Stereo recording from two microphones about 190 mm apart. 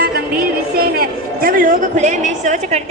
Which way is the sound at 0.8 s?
50° right (ahead or behind).